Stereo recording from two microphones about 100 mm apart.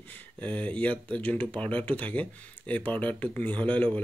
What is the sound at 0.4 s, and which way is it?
Speech, 15° left (ahead or behind).